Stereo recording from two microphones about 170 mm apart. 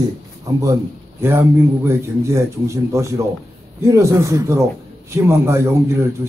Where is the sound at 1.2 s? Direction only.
15° right (ahead or behind).